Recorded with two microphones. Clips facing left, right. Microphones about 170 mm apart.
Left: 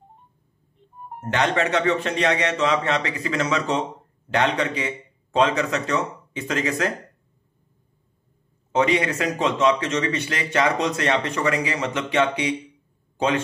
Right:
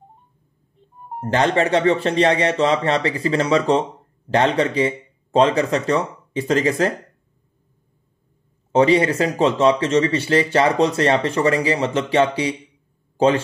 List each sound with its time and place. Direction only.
1.2 s speech: 30° right (ahead or behind)
8.7 s speech: 30° right (ahead or behind)